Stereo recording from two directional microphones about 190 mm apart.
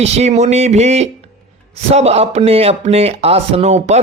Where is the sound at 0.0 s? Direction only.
35° right (ahead or behind).